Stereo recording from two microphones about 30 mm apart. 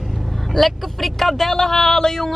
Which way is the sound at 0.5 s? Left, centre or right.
Centre.